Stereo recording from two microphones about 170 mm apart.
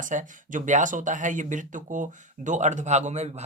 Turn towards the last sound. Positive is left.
turn(degrees=-40)  # may be behind; listen again after turning